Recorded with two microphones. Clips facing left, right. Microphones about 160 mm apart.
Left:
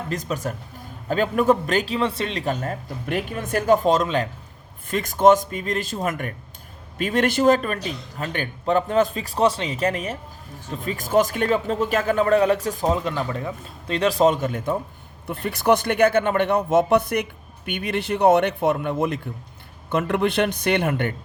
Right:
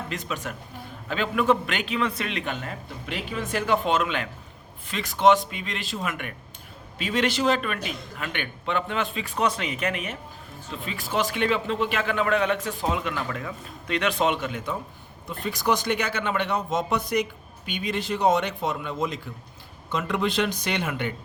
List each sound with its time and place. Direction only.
0.1 s speech: 40° left (ahead or behind)
4.9 s a man's voice: 45° left (ahead or behind)
15.3 s speech: 60° left (ahead or behind)